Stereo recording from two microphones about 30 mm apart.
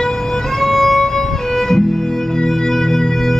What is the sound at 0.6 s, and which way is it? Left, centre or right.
Music, centre.